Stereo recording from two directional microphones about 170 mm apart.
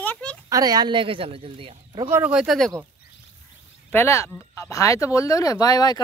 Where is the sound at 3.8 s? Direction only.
15° left (ahead or behind).